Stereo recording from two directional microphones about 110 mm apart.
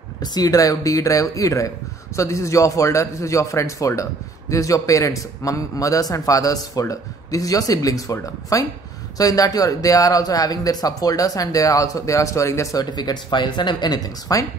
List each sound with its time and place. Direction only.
0.2 s a man's voice: 35° left (ahead or behind)
12.9 s a man's voice: 40° left (ahead or behind)